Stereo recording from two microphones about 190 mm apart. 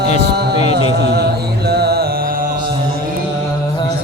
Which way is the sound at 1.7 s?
55° right (ahead or behind).